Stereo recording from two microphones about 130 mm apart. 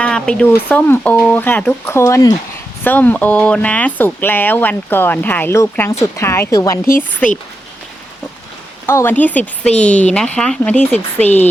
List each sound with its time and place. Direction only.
0.0 s speech: 5° left (ahead or behind); by 2.3 s 25° left (ahead or behind)
2.8 s speech: 10° left (ahead or behind)
8.9 s speech: 15° left (ahead or behind)